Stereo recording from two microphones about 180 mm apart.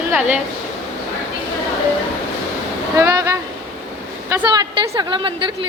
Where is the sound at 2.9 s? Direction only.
15° right (ahead or behind).